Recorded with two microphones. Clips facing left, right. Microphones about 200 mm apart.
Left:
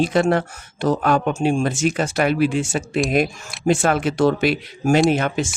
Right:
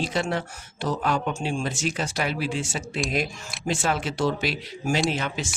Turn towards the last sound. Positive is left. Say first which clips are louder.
# left 8 dB
turn(degrees=55)  # may be behind; listen again after turning